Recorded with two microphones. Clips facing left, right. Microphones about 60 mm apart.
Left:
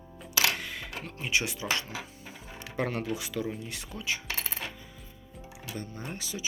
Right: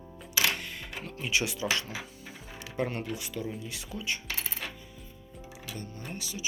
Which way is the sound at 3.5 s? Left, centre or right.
Left.